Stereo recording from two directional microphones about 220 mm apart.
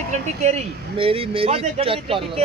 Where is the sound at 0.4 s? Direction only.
30° right (ahead or behind).